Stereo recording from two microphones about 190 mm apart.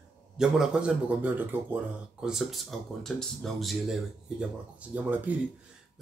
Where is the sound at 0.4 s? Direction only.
5° right (ahead or behind).